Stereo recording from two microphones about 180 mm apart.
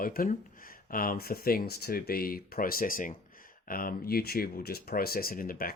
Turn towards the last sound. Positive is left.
turn(degrees=55)  # may be behind; listen again after turning